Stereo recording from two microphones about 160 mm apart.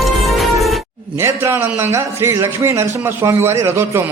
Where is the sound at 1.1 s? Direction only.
15° right (ahead or behind).